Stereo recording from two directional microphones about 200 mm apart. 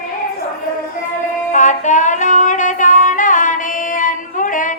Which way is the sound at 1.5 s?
40° left (ahead or behind).